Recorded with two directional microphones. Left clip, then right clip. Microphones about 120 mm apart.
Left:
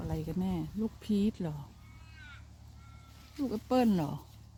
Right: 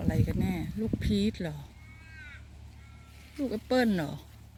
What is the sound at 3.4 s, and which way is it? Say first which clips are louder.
Speech: right 2 dB; 25° left (ahead or behind).